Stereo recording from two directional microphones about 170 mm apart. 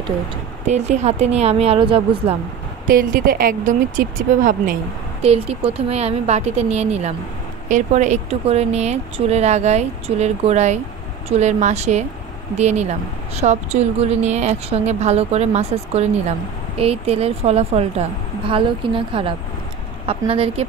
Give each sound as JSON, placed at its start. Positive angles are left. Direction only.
{"t": 0.7, "sound": "a woman's voice", "side_deg": -40}
{"t": 2.9, "sound": "speech", "side_deg": -55}
{"t": 5.2, "sound": "a woman's voice", "side_deg": -35}